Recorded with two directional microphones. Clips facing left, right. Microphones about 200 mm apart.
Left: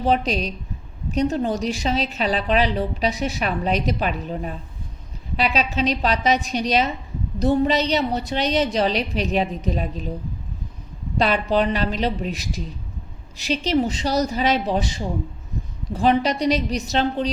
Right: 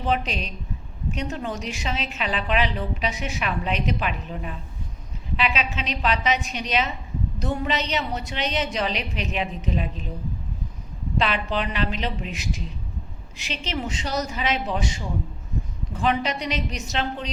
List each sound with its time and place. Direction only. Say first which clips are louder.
0.0 s a woman's voice: left 5 dB; 35° left (ahead or behind)
11.2 s a woman's voice: left 6 dB; 40° left (ahead or behind)